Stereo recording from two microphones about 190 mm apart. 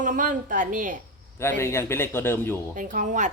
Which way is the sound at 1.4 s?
15° left (ahead or behind).